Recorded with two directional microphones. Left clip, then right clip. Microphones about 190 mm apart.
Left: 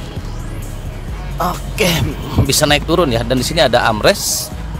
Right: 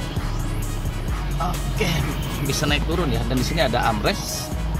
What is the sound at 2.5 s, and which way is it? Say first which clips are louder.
Speech: left 10 dB; 30° left (ahead or behind).